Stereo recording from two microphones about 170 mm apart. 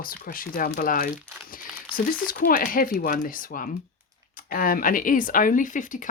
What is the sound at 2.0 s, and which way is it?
Speech, 55° left (ahead or behind).